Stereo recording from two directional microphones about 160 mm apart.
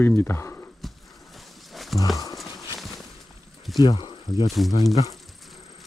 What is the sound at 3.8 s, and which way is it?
Speech, 30° left (ahead or behind).